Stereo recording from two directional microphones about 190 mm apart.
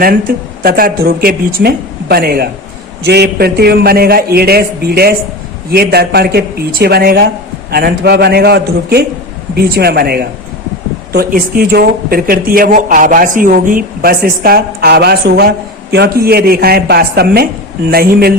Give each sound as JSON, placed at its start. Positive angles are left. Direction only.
{"t": 0.3, "sound": "a man's voice", "side_deg": -50}